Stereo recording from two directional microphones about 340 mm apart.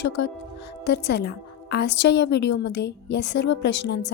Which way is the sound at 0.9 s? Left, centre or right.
Left.